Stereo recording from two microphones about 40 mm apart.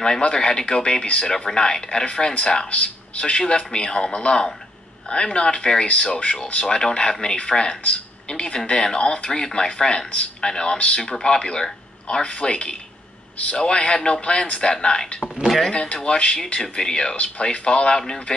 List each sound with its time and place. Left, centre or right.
0.3 s speech: centre
15.4 s speech: centre
15.7 s speech: left